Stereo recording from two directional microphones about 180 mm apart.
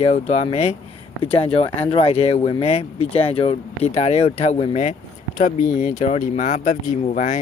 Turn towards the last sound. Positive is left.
turn(degrees=45)  # may be behind; listen again after turning